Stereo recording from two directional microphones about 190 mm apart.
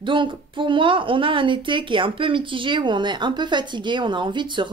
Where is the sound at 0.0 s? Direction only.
25° right (ahead or behind).